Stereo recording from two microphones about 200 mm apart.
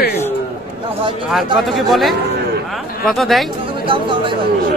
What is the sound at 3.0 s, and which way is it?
Speech, centre (ahead or behind).